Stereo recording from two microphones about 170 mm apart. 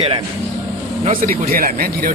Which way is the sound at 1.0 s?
50° right (ahead or behind).